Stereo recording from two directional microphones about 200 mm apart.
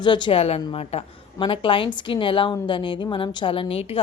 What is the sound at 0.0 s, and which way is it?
A woman's voice, 25° left (ahead or behind).